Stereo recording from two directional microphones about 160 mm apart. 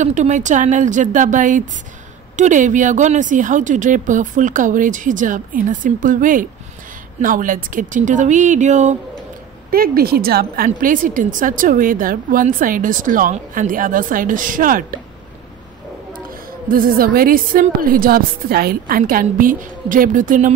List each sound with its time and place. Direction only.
0.0 s speech: 50° right (ahead or behind)
9.7 s a woman's voice: 70° right (ahead or behind)
16.7 s a woman's voice: 65° right (ahead or behind)